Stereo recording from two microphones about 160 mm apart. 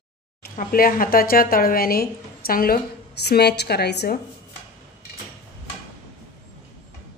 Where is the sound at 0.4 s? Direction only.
65° left (ahead or behind); by 4.2 s 90° left.